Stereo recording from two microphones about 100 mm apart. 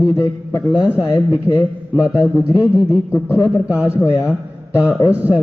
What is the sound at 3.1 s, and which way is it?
Speech, 30° left (ahead or behind).